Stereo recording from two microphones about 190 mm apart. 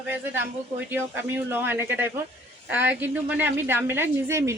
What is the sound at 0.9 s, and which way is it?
A woman's voice, 10° right (ahead or behind).